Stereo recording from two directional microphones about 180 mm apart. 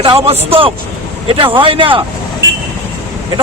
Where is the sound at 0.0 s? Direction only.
30° right (ahead or behind).